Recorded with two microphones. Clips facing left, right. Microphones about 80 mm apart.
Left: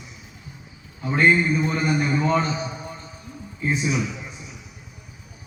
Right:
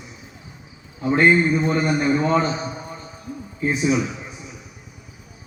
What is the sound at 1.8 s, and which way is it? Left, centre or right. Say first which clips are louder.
Speech: right 2 dB; right.